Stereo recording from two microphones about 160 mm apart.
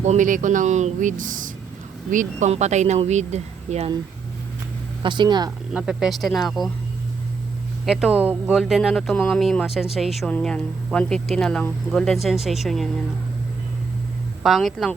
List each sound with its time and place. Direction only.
0.0 s speech: 50° right (ahead or behind)
5.0 s speech: 30° right (ahead or behind)
5.7 s speech: 5° right (ahead or behind)
7.9 s speech: 5° right (ahead or behind)
14.4 s speech: centre (ahead or behind)